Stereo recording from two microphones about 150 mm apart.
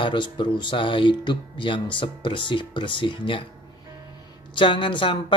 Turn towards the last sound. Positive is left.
turn(degrees=35)  # may be behind; listen again after turning